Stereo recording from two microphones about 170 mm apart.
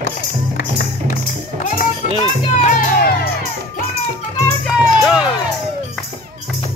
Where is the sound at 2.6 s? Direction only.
50° left (ahead or behind).